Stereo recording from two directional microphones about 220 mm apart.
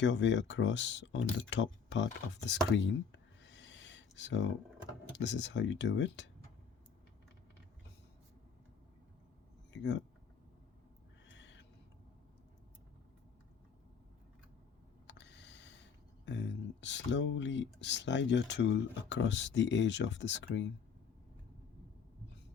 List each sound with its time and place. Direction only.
0.0 s speech: 55° left (ahead or behind)
9.7 s speech: 55° left (ahead or behind)
11.3 s owl: 55° left (ahead or behind)
15.0 s a sound: 50° left (ahead or behind)
16.2 s speech: 55° left (ahead or behind)